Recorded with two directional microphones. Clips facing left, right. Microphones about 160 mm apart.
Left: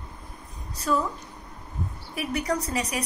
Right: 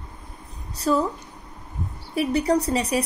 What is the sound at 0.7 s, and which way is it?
Speech, 35° right (ahead or behind).